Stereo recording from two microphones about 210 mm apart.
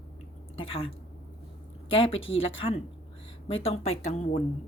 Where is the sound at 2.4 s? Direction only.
25° left (ahead or behind).